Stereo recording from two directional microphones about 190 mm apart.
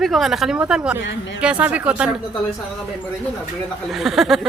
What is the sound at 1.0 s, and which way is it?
Speech, 70° left (ahead or behind).